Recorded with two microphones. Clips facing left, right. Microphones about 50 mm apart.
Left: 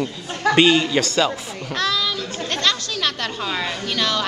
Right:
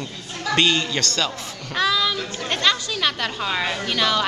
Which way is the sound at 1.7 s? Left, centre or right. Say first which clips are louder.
Right 2 dB; centre.